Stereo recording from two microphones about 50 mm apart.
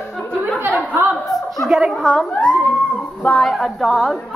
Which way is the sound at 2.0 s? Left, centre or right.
Centre.